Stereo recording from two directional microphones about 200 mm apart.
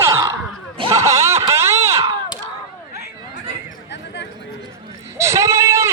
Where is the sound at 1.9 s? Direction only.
30° right (ahead or behind).